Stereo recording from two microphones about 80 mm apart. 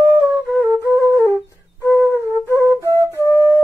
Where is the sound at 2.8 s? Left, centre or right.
Right.